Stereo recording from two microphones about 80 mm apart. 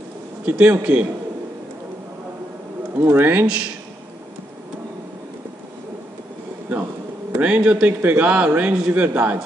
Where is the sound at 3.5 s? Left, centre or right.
Centre.